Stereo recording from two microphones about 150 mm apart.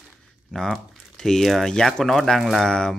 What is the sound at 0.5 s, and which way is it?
Speech, 5° left (ahead or behind).